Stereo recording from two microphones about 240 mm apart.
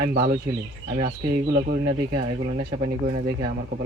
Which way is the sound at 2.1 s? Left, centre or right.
Right.